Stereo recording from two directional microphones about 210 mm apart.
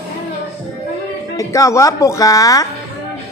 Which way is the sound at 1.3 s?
15° left (ahead or behind).